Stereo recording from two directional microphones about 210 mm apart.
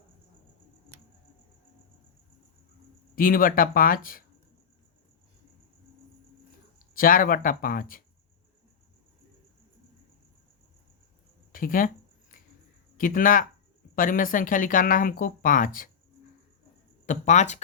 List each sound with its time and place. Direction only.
3.2 s speech: 40° left (ahead or behind)
6.9 s speech: 40° left (ahead or behind)
11.5 s speech: 40° left (ahead or behind)
12.3 s a sound: 40° left (ahead or behind)
13.0 s speech: 40° left (ahead or behind)
17.1 s speech: 35° left (ahead or behind)